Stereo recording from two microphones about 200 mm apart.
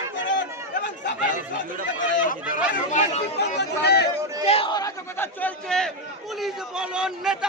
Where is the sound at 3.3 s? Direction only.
55° left (ahead or behind).